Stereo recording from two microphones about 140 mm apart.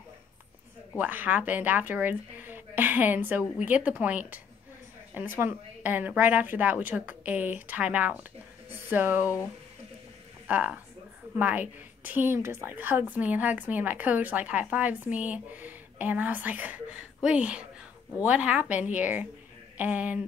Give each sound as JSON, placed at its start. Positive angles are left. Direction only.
{"t": 0.9, "sound": "a woman's voice", "side_deg": -10}
{"t": 9.2, "sound": "speech", "side_deg": 20}
{"t": 10.4, "sound": "a woman's voice", "side_deg": -10}